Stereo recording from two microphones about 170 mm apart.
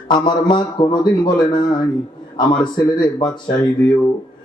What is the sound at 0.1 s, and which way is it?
Speech, 25° left (ahead or behind).